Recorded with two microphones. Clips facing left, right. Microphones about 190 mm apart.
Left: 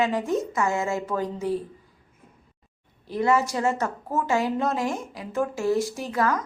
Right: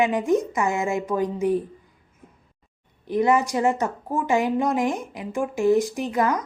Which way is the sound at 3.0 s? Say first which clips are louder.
Right 2 dB; 15° right (ahead or behind).